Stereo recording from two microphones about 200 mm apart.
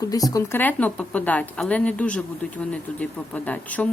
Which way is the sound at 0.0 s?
20° left (ahead or behind).